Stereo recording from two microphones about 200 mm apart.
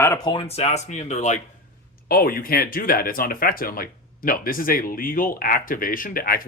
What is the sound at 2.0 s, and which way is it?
Speech, 45° left (ahead or behind).